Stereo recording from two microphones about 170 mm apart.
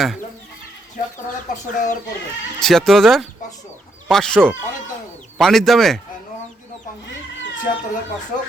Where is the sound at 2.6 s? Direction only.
Centre (ahead or behind).